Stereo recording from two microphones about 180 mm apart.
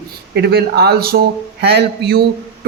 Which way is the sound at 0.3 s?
65° right (ahead or behind).